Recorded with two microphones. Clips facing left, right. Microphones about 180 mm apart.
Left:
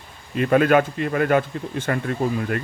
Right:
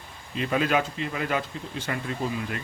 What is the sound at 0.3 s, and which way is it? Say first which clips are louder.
Speech: left 8 dB; 55° left (ahead or behind).